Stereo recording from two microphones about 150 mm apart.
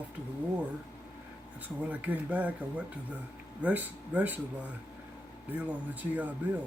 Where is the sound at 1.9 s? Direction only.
10° right (ahead or behind).